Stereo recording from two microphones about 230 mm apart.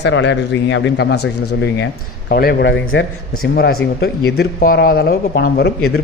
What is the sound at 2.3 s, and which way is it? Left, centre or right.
A man's voice, left.